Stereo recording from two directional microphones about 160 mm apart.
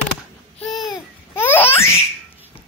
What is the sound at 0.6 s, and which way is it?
Babbling, centre (ahead or behind).